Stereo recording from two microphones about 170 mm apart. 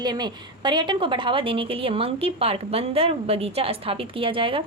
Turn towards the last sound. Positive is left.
turn(degrees=-30)  # may be behind; listen again after turning